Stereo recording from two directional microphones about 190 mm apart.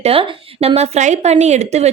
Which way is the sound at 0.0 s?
30° right (ahead or behind).